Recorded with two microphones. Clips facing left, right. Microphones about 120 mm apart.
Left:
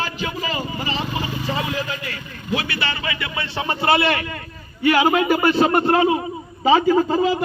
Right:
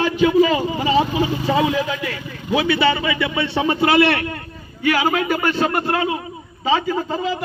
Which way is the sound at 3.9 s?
75° right (ahead or behind).